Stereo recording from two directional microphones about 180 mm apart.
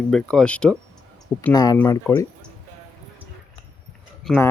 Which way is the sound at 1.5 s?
20° left (ahead or behind).